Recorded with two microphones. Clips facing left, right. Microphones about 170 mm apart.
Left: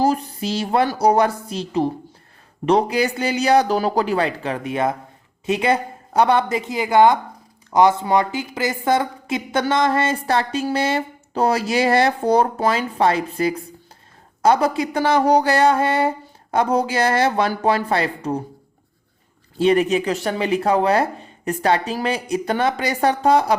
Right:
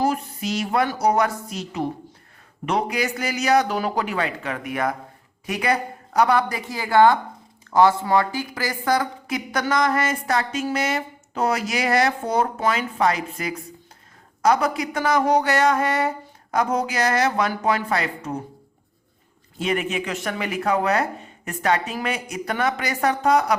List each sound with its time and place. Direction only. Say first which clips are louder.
0.0 s a woman's voice: left 4 dB; 35° left (ahead or behind)
19.5 s speech: left 8 dB; 35° left (ahead or behind)